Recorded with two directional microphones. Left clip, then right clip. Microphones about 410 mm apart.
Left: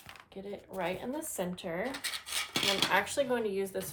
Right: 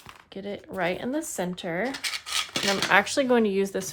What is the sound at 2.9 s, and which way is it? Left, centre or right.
Speech, centre.